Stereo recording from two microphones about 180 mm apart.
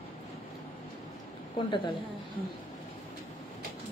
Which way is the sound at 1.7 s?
25° left (ahead or behind).